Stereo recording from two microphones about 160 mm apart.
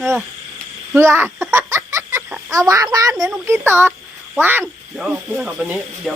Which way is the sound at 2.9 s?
20° right (ahead or behind).